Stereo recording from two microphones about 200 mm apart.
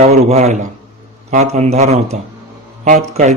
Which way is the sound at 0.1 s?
35° right (ahead or behind).